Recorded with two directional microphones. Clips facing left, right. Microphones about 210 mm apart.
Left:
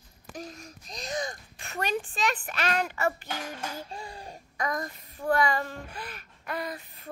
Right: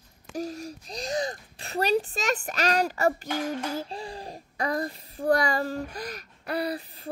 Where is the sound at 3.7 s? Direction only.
35° right (ahead or behind).